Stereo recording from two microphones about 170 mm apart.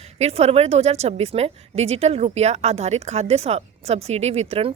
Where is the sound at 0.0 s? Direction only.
40° right (ahead or behind).